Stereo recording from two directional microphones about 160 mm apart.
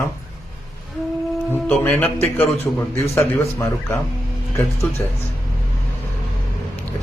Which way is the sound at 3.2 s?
15° left (ahead or behind).